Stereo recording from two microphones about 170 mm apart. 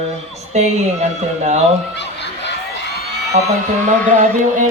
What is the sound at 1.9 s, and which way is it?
Speech, 90° left.